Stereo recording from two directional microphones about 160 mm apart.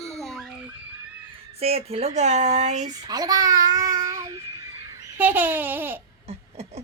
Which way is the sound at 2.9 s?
25° right (ahead or behind).